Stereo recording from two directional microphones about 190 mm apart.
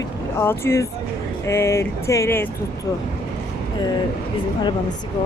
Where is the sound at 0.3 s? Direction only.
15° left (ahead or behind).